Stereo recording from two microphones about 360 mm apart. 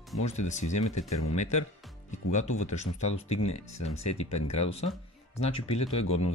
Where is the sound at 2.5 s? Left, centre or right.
Centre.